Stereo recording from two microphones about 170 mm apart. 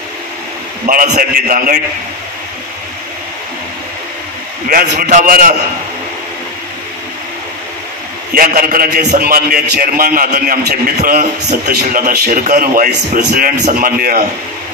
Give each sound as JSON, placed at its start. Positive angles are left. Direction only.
{"t": 0.8, "sound": "a man's voice", "side_deg": -50}
{"t": 4.6, "sound": "a man's voice", "side_deg": -55}
{"t": 8.4, "sound": "a man's voice", "side_deg": -55}